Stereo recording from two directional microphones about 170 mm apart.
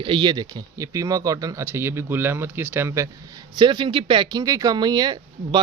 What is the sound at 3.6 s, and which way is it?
Speech, 30° right (ahead or behind).